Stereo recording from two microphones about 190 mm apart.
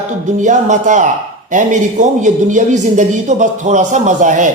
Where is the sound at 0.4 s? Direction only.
40° right (ahead or behind).